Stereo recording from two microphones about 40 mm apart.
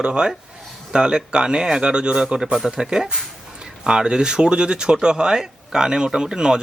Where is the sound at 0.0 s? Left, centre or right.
Right.